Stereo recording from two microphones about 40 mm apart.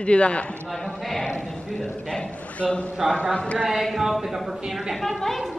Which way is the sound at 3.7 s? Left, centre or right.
Centre.